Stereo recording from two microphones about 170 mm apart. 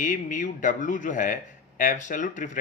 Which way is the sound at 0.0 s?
50° left (ahead or behind).